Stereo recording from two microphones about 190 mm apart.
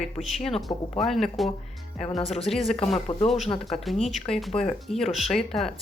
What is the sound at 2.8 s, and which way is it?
Speech, 35° left (ahead or behind).